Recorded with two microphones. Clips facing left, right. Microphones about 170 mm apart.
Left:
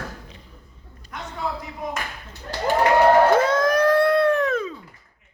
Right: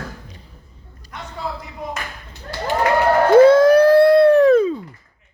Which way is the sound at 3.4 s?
30° right (ahead or behind).